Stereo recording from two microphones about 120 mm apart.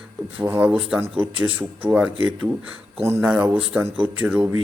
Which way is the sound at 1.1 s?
45° right (ahead or behind).